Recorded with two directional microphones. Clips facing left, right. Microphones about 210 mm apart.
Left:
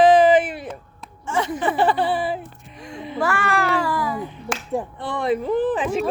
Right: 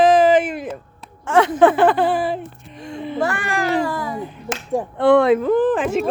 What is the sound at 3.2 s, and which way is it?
Speech, 20° right (ahead or behind).